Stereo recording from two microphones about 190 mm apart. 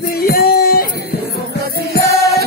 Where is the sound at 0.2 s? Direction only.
50° left (ahead or behind).